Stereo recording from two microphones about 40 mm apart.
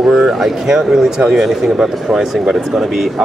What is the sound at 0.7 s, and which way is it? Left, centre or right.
Speech, right.